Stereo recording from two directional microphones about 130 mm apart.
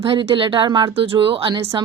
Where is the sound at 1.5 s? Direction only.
25° right (ahead or behind).